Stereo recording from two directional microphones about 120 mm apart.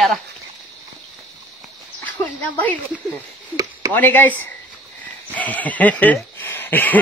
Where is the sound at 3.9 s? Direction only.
15° left (ahead or behind).